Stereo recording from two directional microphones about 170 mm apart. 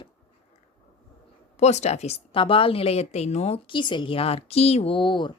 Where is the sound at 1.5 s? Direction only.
40° left (ahead or behind).